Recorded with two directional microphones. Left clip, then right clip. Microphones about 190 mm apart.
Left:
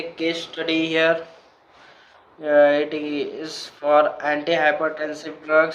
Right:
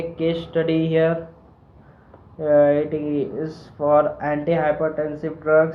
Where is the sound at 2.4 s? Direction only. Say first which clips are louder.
Even; 25° left (ahead or behind).